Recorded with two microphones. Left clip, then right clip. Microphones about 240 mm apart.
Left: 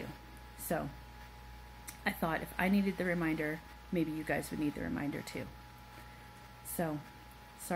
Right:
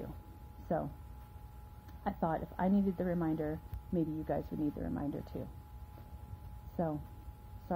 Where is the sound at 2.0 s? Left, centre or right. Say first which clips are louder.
Even; left.